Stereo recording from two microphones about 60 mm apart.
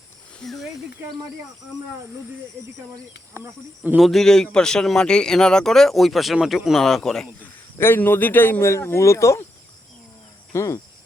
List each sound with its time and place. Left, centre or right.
0.4 s a man's voice: centre
3.3 s speech: right
4.0 s a man's voice: centre
7.8 s a man's voice: left
8.9 s speech: left
10.5 s speech: left